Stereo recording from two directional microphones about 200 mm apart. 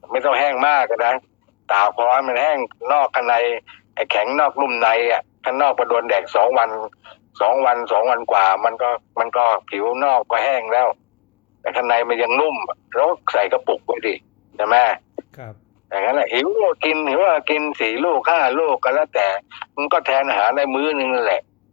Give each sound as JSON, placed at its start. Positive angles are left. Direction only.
{"t": 0.1, "sound": "a man's voice", "side_deg": 55}
{"t": 15.3, "sound": "speech", "side_deg": 30}
{"t": 15.9, "sound": "speech", "side_deg": 55}